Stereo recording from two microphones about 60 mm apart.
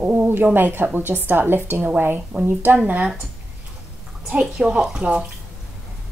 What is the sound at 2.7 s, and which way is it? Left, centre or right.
Speech, right.